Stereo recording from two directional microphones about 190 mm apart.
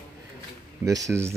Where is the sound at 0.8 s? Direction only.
15° right (ahead or behind).